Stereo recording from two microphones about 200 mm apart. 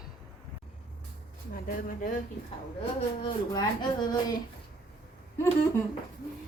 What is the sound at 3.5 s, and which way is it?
Speech, 20° left (ahead or behind).